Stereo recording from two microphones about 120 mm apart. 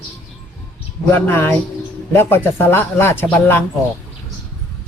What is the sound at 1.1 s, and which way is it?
Speech, 20° left (ahead or behind).